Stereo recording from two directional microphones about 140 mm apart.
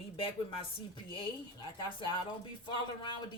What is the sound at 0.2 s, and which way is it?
Speech, 40° left (ahead or behind).